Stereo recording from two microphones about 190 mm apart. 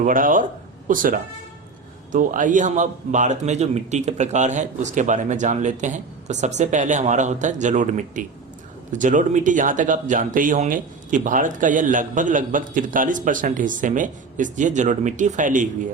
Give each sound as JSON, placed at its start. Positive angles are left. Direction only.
{"t": 0.0, "sound": "a man's voice", "side_deg": -45}